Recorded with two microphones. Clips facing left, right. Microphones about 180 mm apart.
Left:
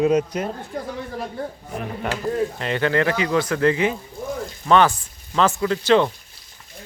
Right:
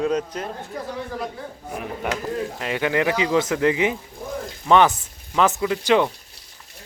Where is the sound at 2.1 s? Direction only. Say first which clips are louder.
Left 3 dB; 10° right (ahead or behind).